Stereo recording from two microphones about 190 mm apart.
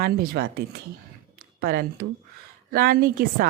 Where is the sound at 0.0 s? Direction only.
55° right (ahead or behind).